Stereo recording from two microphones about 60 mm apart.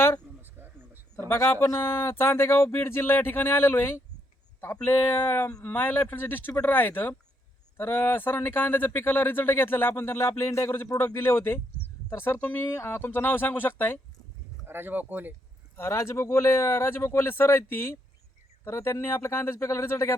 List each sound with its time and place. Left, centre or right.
0.4 s a sound: right
1.3 s speech: left
12.6 s speech: left
14.7 s speech: right
15.7 s speech: left